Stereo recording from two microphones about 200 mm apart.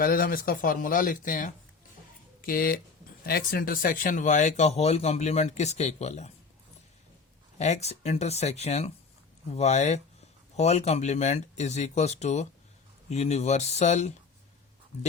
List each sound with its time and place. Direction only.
0.0 s speech: 45° left (ahead or behind)
7.6 s speech: 35° left (ahead or behind)